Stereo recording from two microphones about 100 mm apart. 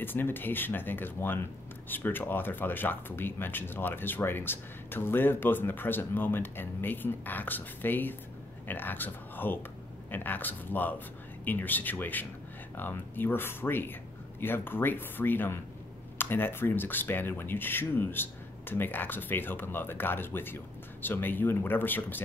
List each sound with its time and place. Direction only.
0.0 s speech: 20° left (ahead or behind)